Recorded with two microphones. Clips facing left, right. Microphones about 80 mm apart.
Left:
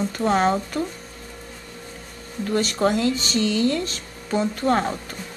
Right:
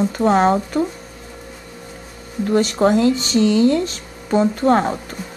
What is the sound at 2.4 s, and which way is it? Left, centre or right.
Speech, centre.